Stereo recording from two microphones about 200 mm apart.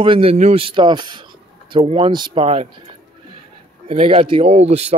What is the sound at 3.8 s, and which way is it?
Speech, 30° right (ahead or behind).